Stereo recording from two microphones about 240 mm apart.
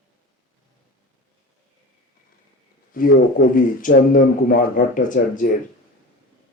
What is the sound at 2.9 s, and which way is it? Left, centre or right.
Speech, left.